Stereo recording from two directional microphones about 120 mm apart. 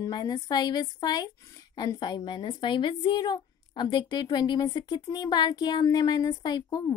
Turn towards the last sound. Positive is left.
turn(degrees=35)  # may be behind; listen again after turning